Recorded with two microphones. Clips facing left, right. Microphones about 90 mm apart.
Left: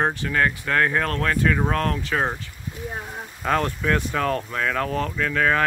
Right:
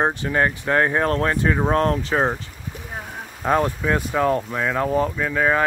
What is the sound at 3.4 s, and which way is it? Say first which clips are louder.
Speech: right 3 dB; 15° right (ahead or behind).